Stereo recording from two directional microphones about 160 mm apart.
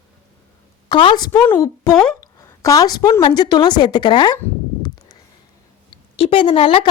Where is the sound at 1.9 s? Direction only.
5° left (ahead or behind).